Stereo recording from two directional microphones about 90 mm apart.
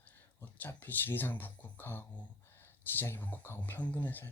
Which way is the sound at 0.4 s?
20° left (ahead or behind).